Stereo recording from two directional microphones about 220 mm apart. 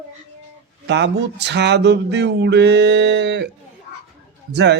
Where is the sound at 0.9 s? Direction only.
50° right (ahead or behind).